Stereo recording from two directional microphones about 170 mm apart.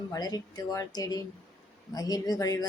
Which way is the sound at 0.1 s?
20° left (ahead or behind).